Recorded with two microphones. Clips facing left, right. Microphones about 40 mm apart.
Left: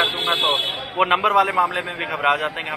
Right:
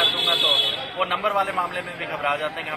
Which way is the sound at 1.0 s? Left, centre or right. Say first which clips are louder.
Left 6 dB; left.